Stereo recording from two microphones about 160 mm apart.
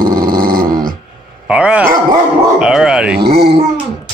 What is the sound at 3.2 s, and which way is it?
Speech, 80° right.